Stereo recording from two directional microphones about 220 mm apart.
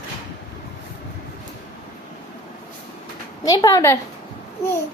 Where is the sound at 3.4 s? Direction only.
15° left (ahead or behind).